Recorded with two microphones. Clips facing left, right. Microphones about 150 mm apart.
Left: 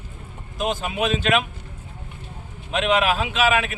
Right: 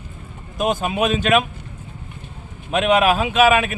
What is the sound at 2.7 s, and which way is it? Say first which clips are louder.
Speech: right 4 dB; 45° right (ahead or behind).